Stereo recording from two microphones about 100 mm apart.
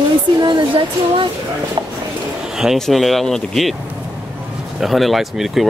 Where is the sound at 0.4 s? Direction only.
50° right (ahead or behind).